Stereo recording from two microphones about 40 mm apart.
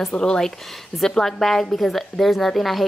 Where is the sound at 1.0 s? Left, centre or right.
Centre.